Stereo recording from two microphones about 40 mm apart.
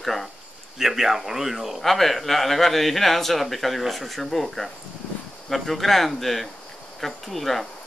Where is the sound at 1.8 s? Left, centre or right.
Centre.